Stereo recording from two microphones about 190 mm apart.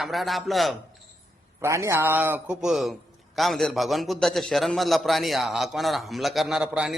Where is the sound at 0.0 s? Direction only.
Centre (ahead or behind).